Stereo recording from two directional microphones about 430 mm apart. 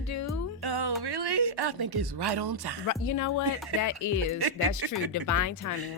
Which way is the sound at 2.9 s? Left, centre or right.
Left.